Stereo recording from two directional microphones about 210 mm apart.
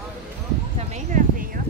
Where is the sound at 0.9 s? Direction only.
35° right (ahead or behind).